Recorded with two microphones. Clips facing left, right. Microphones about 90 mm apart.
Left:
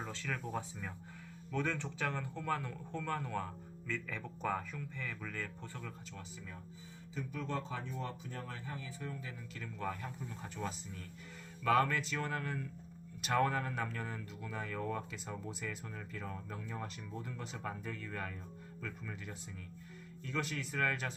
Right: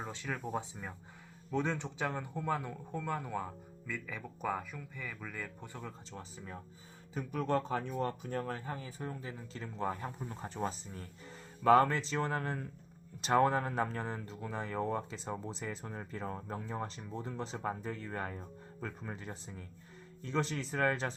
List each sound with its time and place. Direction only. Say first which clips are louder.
0.0 s speech: right 2 dB; 20° right (ahead or behind)
6.1 s speech: right 3 dB; 35° right (ahead or behind)
7.1 s speech: right 7 dB; 55° right (ahead or behind); by 21.2 s 30° right (ahead or behind)